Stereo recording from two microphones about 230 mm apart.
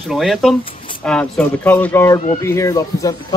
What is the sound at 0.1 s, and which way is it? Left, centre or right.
A man's voice, centre.